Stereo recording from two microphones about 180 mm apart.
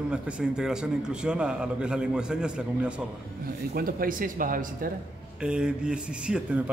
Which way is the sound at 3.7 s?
55° right (ahead or behind).